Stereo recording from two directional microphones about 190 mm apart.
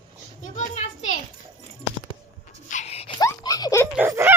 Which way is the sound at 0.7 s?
35° left (ahead or behind).